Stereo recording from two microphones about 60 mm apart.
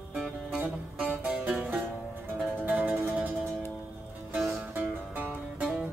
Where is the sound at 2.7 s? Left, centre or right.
Right.